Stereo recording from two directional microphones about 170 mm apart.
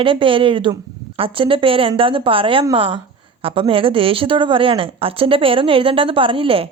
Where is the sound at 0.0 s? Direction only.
30° right (ahead or behind).